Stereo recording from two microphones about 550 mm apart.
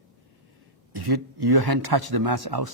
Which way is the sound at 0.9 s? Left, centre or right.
Right.